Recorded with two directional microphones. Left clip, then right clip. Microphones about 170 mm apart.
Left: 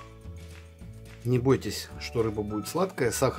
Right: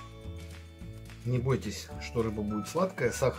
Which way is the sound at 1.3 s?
55° left (ahead or behind).